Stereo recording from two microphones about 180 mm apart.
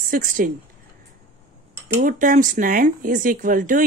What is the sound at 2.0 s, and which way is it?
Speech, 45° right (ahead or behind).